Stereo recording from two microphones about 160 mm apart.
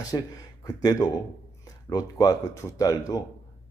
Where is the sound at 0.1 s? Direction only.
25° left (ahead or behind).